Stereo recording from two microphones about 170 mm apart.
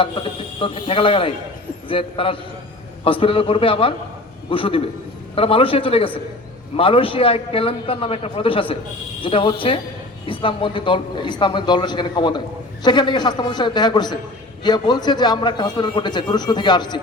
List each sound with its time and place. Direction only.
0.0 s a man's voice: 30° left (ahead or behind)